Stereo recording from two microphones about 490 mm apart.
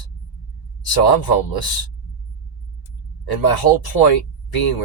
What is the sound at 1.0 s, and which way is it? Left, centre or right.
Speech, left.